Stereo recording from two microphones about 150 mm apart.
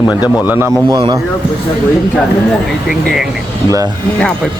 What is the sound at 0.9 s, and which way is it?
Speech, 30° right (ahead or behind).